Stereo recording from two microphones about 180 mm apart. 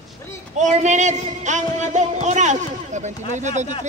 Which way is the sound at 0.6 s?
40° right (ahead or behind).